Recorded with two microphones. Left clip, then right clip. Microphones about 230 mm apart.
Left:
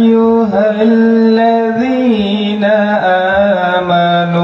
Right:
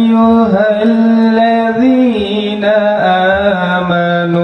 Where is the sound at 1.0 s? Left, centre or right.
Right.